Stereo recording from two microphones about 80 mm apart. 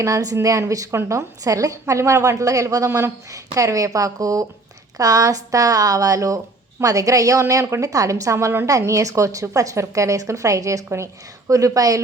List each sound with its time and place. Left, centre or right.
0.0 s speech: right